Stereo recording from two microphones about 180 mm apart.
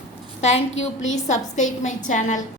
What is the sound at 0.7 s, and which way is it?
Speech, 90° left.